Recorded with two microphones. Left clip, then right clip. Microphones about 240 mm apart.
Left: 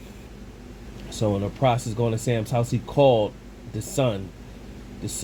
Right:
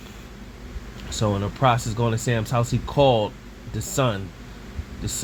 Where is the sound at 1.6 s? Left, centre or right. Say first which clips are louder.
Right 2 dB; right.